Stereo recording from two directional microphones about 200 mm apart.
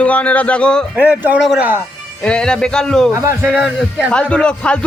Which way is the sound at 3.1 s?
15° right (ahead or behind).